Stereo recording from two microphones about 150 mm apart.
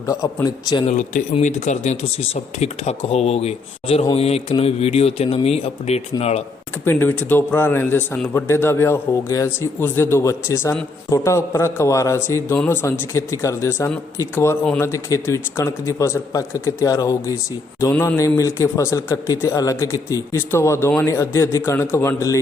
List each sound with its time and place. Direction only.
0.1 s a man's voice: 20° left (ahead or behind)
0.9 s speech: 50° left (ahead or behind)
6.8 s a man's voice: 15° left (ahead or behind)